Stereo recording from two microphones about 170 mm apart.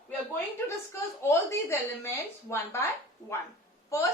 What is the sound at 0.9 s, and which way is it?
A woman's voice, 15° left (ahead or behind).